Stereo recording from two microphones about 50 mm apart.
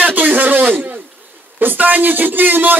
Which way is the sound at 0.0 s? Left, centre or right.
Right.